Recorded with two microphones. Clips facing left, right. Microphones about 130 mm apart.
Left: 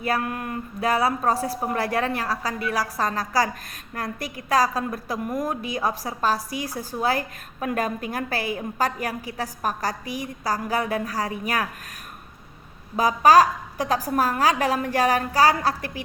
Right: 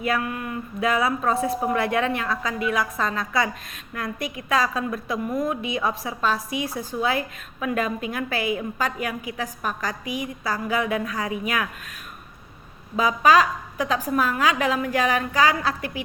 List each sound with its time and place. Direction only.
0.0 s a woman's voice: 40° left (ahead or behind)
13.0 s a woman's voice: 40° left (ahead or behind)